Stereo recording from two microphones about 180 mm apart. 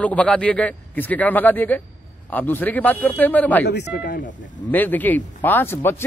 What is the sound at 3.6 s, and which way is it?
Speech, 70° left (ahead or behind).